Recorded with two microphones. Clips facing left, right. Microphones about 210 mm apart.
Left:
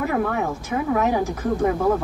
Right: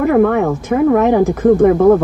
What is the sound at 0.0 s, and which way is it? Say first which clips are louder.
Speech: right 11 dB; 55° right (ahead or behind).